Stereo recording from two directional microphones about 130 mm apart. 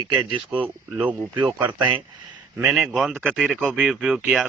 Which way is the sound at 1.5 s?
10° right (ahead or behind).